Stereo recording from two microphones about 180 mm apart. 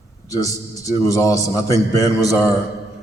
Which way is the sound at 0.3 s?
20° left (ahead or behind).